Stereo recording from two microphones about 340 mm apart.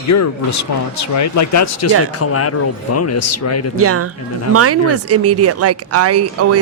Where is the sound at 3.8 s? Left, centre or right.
Right.